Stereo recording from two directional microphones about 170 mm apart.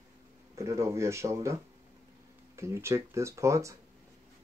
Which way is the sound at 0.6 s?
15° right (ahead or behind).